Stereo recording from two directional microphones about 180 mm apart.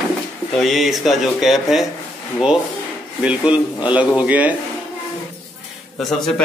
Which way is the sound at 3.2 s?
5° right (ahead or behind).